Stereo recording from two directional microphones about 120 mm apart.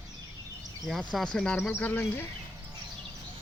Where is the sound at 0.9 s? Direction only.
Centre (ahead or behind).